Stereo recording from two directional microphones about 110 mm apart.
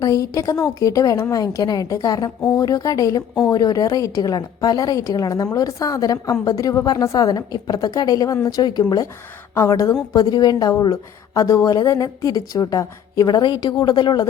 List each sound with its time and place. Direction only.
0.0 s a woman's voice: 30° left (ahead or behind)
9.6 s a woman's voice: 30° left (ahead or behind); by 14.3 s 45° left (ahead or behind)